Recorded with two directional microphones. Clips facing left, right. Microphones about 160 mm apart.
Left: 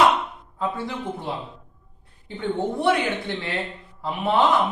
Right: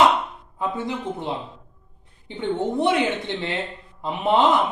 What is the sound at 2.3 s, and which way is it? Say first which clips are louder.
A man's voice: right 1 dB; 20° right (ahead or behind).